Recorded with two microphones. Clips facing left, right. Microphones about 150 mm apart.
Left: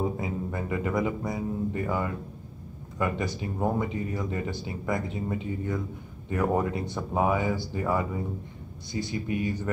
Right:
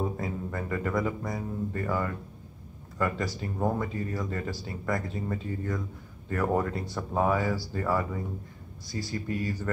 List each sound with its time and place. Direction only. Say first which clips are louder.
0.0 s speech: left 2 dB; 15° left (ahead or behind)